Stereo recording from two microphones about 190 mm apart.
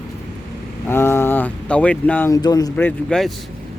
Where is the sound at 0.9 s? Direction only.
15° left (ahead or behind).